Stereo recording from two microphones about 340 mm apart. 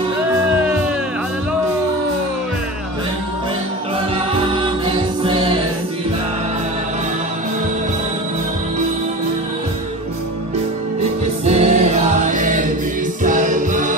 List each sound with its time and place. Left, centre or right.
4.3 s music: centre
11.4 s music: centre